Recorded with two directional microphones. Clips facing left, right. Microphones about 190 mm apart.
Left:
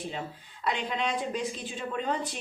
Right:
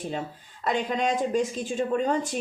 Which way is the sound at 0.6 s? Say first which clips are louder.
Right 5 dB; 45° right (ahead or behind).